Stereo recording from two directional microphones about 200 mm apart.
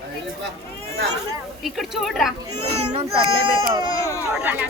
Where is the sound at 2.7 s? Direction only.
35° right (ahead or behind).